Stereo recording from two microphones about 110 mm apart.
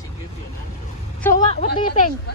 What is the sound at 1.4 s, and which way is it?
Speech, 85° left.